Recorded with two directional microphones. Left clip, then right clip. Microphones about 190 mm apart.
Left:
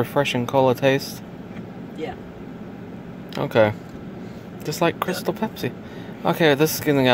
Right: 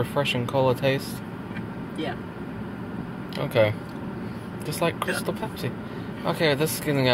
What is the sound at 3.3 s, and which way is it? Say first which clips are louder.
Speech: left 4 dB; 50° left (ahead or behind).